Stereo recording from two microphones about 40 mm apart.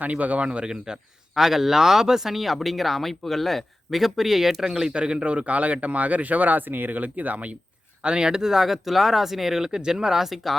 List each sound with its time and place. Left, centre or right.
0.0 s speech: right
1.4 s speech: centre
4.9 s speech: right
8.0 s speech: centre